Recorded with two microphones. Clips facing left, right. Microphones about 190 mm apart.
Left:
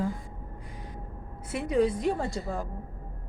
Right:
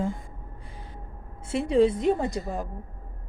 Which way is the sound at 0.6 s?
25° right (ahead or behind).